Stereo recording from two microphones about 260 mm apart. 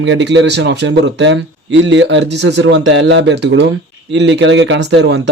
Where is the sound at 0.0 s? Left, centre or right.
Right.